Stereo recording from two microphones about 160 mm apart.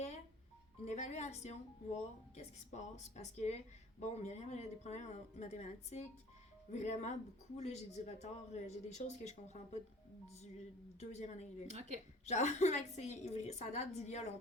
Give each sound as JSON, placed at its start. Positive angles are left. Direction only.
{"t": 0.9, "sound": "speech", "side_deg": 45}
{"t": 11.0, "sound": "speech", "side_deg": 45}
{"t": 11.7, "sound": "a woman's voice", "side_deg": -45}
{"t": 12.2, "sound": "speech", "side_deg": 45}